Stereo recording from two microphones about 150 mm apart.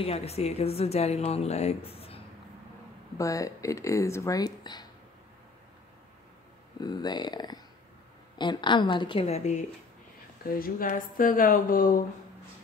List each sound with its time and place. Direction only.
0.0 s speech: 45° left (ahead or behind)
3.2 s speech: 20° left (ahead or behind)
6.8 s a woman's voice: 30° left (ahead or behind); by 9.7 s 50° left (ahead or behind)
10.4 s a woman's voice: 75° left (ahead or behind)